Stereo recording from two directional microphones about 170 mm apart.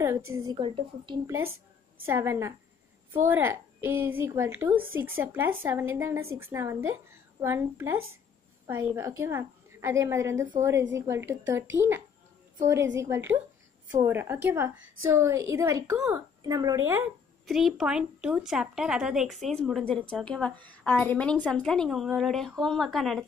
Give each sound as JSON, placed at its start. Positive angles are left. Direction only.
{"t": 0.0, "sound": "a woman's voice", "side_deg": -15}
{"t": 0.6, "sound": "speech", "side_deg": -30}
{"t": 1.2, "sound": "a woman's voice", "side_deg": -15}
{"t": 13.0, "sound": "a woman's voice", "side_deg": -15}
{"t": 17.5, "sound": "speech", "side_deg": 0}